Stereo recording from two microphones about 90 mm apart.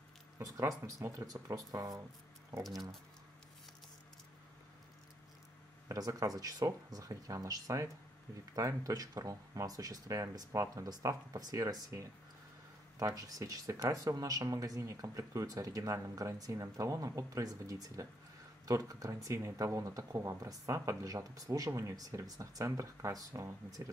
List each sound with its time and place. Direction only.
0.4 s speech: 35° right (ahead or behind)
5.9 s speech: 40° right (ahead or behind)